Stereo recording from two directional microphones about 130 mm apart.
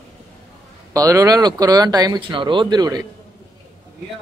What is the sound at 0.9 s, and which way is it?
Speech, 25° right (ahead or behind).